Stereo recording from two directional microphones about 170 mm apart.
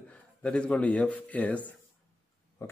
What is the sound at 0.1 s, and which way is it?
A man's voice, 5° left (ahead or behind).